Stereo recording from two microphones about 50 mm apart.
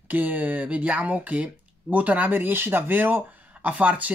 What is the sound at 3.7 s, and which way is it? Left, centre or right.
Speech, right.